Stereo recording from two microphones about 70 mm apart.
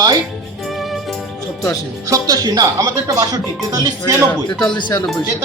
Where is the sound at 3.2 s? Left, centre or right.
Right.